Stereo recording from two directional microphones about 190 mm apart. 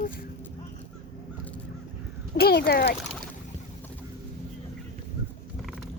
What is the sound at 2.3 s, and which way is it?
Speech, 55° left (ahead or behind).